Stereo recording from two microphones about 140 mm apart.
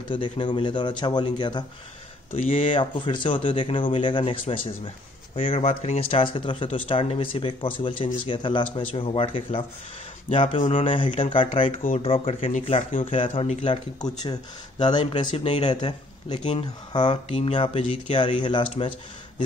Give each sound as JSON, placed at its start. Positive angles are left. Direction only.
{"t": 0.1, "sound": "speech", "side_deg": 35}
{"t": 2.7, "sound": "speech", "side_deg": 35}
{"t": 12.5, "sound": "speech", "side_deg": 60}
{"t": 13.1, "sound": "speech", "side_deg": 40}
{"t": 14.0, "sound": "speech", "side_deg": 30}
{"t": 16.3, "sound": "speech", "side_deg": 45}